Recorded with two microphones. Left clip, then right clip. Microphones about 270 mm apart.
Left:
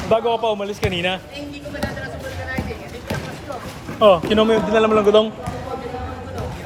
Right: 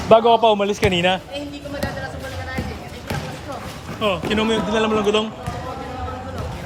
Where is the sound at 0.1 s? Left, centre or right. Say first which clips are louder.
Right 6 dB; right.